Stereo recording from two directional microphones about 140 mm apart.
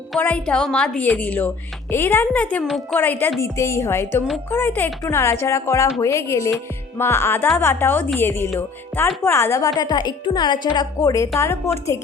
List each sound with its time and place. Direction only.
0.2 s a woman's voice: 10° left (ahead or behind)